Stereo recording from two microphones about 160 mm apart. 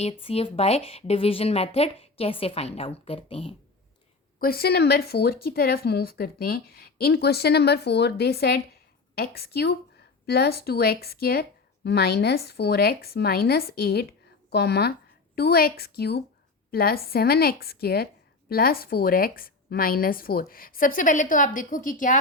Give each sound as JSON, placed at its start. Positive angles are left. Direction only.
{"t": 0.0, "sound": "speech", "side_deg": 40}
{"t": 4.4, "sound": "speech", "side_deg": 70}
{"t": 10.2, "sound": "speech", "side_deg": 80}
{"t": 15.4, "sound": "speech", "side_deg": 75}
{"t": 16.7, "sound": "a woman's voice", "side_deg": 70}